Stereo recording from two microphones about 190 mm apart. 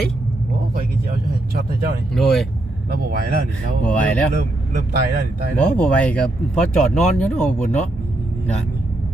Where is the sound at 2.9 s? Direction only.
55° right (ahead or behind).